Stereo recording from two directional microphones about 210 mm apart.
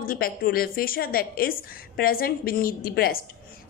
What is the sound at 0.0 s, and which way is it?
A woman's voice, 45° left (ahead or behind).